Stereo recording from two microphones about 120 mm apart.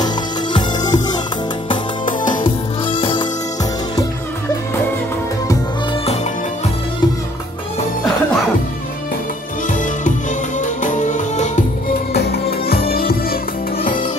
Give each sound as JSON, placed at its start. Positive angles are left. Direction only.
{"t": 0.0, "sound": "music", "side_deg": 40}
{"t": 2.0, "sound": "music", "side_deg": 90}
{"t": 2.9, "sound": "music", "side_deg": 45}
{"t": 10.6, "sound": "music", "side_deg": 90}